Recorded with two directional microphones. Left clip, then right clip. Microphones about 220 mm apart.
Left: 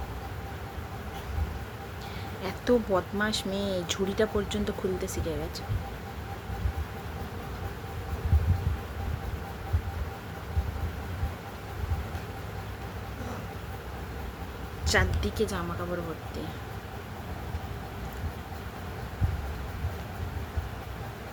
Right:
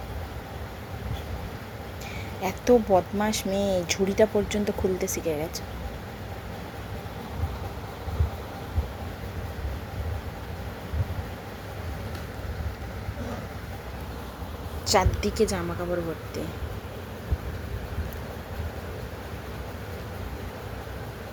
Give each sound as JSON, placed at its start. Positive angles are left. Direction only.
{"t": 2.4, "sound": "speech", "side_deg": -10}
{"t": 14.8, "sound": "a woman's voice", "side_deg": -15}